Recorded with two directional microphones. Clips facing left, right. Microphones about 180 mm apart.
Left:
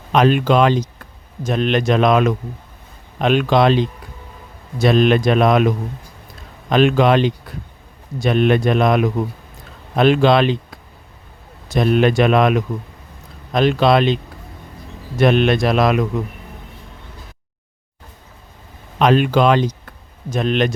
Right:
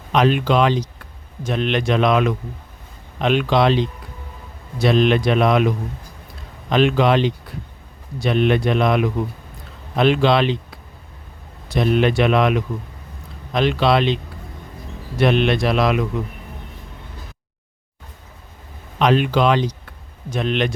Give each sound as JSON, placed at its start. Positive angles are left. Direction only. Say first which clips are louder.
{"t": 0.1, "sound": "speech", "louder": "left 3 dB", "side_deg": 45}
{"t": 15.2, "sound": "speech", "louder": "left 3 dB", "side_deg": 45}
{"t": 18.9, "sound": "speech", "louder": "left 3 dB", "side_deg": 45}